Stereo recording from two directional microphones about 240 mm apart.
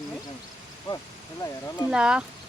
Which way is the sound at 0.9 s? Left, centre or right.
Left.